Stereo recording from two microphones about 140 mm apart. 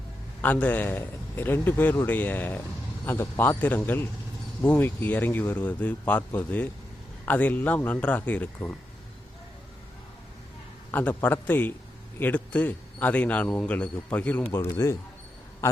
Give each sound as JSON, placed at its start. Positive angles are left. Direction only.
{"t": 0.4, "sound": "speech", "side_deg": 10}
{"t": 10.9, "sound": "a man's voice", "side_deg": 15}